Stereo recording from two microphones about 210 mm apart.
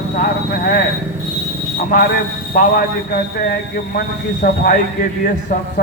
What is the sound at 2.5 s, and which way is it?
A man's voice, 45° left (ahead or behind).